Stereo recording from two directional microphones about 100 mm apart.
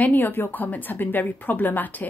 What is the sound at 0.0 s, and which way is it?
A woman's voice, 20° left (ahead or behind).